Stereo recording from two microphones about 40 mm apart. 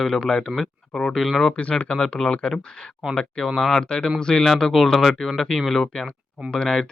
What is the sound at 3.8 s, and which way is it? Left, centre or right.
Speech, centre.